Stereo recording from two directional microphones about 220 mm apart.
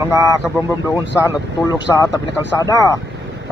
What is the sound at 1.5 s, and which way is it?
Speech, 15° left (ahead or behind).